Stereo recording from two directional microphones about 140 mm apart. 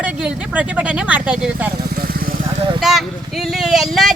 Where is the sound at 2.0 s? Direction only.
90° right.